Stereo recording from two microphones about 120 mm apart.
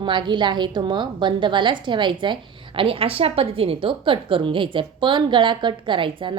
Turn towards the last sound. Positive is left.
turn(degrees=-45)  # may be behind; listen again after turning